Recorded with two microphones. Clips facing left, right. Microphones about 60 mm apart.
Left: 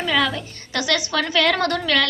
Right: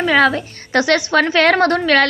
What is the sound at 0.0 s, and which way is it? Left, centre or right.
A woman's voice, right.